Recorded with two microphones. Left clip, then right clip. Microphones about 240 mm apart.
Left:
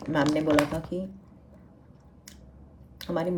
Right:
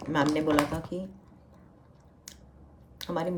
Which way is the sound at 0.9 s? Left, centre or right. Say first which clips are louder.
Left 3 dB; left.